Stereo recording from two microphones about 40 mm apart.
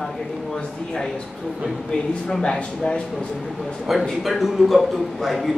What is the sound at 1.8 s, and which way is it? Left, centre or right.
Speech, centre.